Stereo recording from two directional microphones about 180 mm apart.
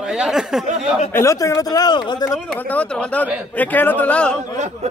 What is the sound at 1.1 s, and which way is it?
Speech, 15° left (ahead or behind).